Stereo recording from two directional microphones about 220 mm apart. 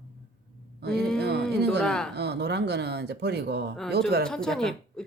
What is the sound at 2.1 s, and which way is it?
Speech, 50° right (ahead or behind).